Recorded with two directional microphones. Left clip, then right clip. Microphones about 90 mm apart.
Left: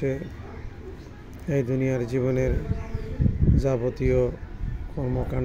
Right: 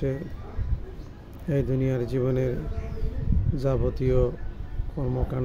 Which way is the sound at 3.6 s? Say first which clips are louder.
Left 1 dB; 25° right (ahead or behind).